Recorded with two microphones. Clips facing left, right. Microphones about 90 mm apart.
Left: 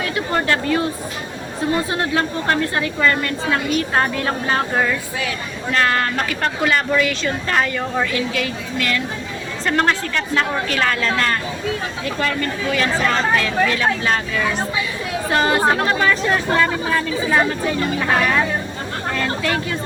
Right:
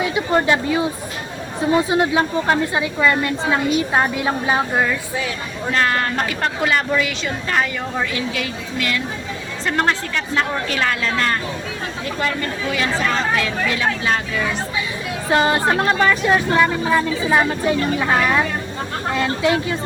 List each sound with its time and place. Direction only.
0.0 s a woman's voice: 15° right (ahead or behind)
5.7 s a woman's voice: 20° right (ahead or behind)
7.5 s a woman's voice: 5° right (ahead or behind)
8.1 s a woman's voice: 25° right (ahead or behind)